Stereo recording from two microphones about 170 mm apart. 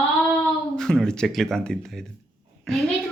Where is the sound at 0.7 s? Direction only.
5° left (ahead or behind).